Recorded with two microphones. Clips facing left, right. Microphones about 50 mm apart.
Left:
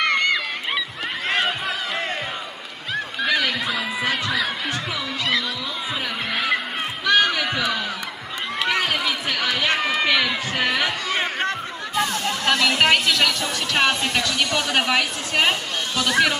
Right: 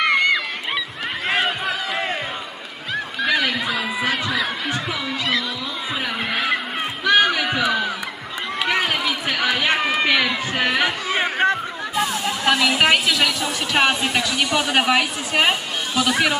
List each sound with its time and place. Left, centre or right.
0.0 s a sound: centre
1.3 s crowd: centre
2.9 s neigh: centre
6.3 s honk: centre
7.1 s a sound: centre
8.5 s run: centre